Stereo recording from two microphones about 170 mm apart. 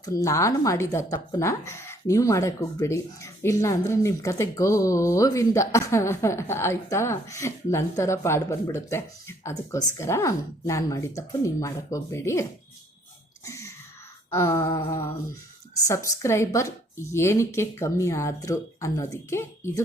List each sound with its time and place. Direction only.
0.0 s speech: 20° left (ahead or behind)
13.4 s sneeze: 20° left (ahead or behind)
14.3 s speech: 15° left (ahead or behind)